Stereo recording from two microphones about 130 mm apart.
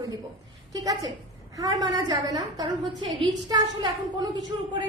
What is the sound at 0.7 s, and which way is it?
A woman's voice, 30° right (ahead or behind).